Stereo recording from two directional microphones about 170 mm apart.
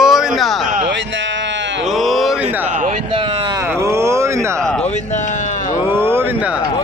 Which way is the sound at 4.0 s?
15° right (ahead or behind).